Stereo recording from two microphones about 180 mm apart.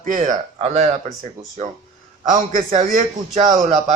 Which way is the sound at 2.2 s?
45° right (ahead or behind).